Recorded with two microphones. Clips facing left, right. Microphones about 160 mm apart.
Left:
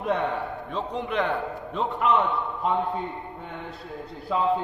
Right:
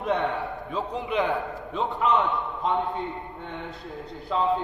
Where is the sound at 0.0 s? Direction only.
Centre (ahead or behind).